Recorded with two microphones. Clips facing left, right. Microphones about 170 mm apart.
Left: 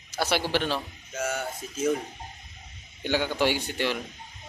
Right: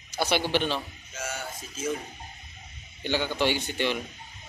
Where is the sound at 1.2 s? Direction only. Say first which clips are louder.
Left 6 dB; 55° left (ahead or behind).